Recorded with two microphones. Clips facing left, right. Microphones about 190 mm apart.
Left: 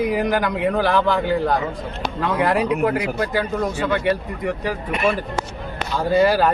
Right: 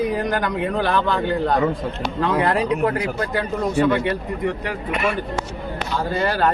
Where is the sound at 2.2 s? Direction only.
5° left (ahead or behind).